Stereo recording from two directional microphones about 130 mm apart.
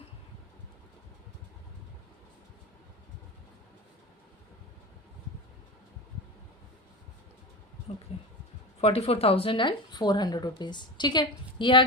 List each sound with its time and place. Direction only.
8.8 s speech: 50° left (ahead or behind)